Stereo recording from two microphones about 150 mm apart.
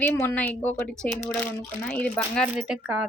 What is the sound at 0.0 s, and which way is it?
Speech, 15° left (ahead or behind).